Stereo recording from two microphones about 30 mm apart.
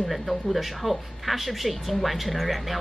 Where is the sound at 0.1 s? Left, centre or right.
Centre.